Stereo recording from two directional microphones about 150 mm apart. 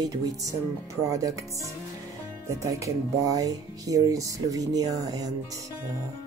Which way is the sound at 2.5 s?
20° right (ahead or behind).